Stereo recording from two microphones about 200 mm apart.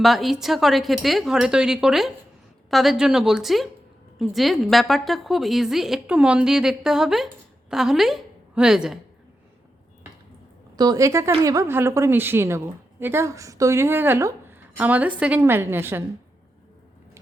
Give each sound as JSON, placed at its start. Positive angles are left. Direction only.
{"t": 0.0, "sound": "a woman's voice", "side_deg": 0}
{"t": 10.8, "sound": "a woman's voice", "side_deg": -20}